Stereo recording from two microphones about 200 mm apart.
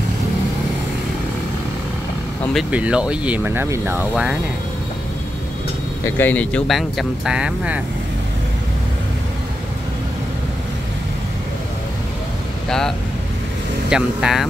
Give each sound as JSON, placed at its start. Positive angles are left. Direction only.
{"t": 2.7, "sound": "speech", "side_deg": -5}
{"t": 6.0, "sound": "speech", "side_deg": 10}
{"t": 12.6, "sound": "speech", "side_deg": 5}